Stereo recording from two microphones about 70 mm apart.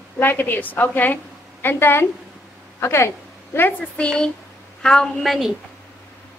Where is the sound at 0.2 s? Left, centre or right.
Left.